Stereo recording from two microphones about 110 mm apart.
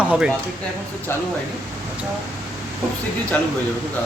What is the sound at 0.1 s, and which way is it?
Speech, 5° right (ahead or behind).